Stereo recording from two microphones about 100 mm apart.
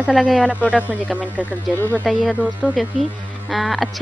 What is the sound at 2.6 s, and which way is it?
Speech, centre (ahead or behind).